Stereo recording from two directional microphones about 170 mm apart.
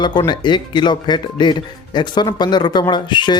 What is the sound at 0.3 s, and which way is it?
Speech, 25° left (ahead or behind).